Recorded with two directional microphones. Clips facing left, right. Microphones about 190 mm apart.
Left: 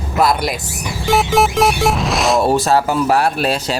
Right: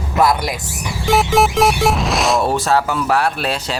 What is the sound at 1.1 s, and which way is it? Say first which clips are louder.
Speech: even; centre (ahead or behind).